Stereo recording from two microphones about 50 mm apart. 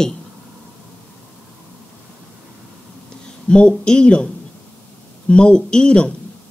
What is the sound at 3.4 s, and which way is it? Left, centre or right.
Speech, centre.